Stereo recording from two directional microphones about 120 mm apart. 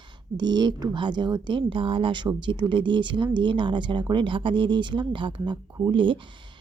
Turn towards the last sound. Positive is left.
turn(degrees=-45)  # may be behind; listen again after turning